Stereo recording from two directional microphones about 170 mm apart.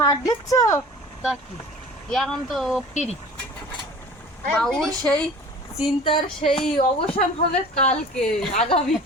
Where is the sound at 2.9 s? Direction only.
40° left (ahead or behind).